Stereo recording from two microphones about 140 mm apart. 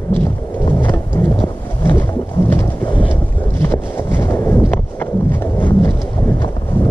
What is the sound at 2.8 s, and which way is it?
Wind noise, 35° left (ahead or behind).